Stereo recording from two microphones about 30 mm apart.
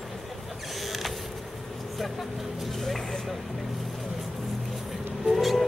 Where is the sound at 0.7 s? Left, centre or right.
Centre.